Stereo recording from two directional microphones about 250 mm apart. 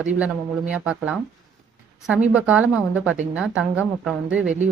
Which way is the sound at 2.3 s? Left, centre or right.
Centre.